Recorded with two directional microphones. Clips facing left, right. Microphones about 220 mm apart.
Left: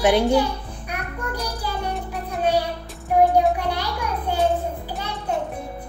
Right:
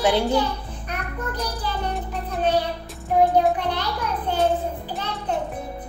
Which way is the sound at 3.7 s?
10° left (ahead or behind).